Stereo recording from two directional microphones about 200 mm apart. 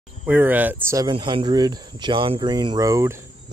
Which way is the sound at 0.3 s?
10° right (ahead or behind).